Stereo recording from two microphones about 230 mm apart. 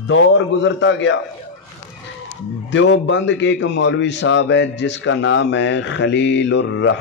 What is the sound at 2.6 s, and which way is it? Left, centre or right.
A man's voice, left.